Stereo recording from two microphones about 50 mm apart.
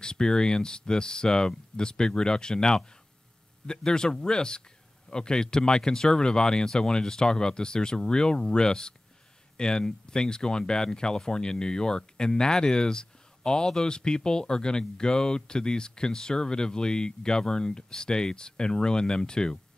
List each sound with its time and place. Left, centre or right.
0.0 s speech: centre